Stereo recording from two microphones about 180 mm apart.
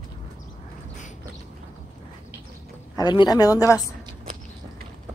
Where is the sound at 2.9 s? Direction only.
25° left (ahead or behind).